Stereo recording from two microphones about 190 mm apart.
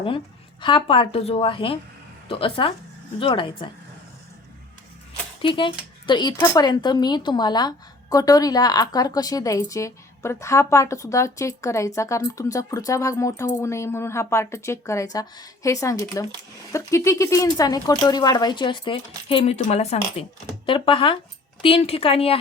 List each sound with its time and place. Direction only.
0.6 s speech: 25° left (ahead or behind)
5.4 s a woman's voice: 25° left (ahead or behind)